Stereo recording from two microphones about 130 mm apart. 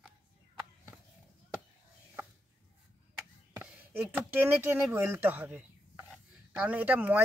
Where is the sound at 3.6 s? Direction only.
15° right (ahead or behind).